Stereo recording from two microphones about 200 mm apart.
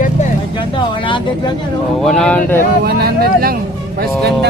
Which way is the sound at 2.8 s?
50° right (ahead or behind).